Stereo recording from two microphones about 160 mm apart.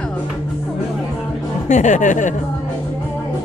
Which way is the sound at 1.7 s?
50° left (ahead or behind).